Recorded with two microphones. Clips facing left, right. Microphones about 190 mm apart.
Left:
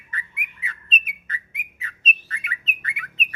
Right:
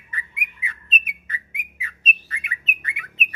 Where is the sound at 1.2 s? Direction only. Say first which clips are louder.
Even; 15° right (ahead or behind).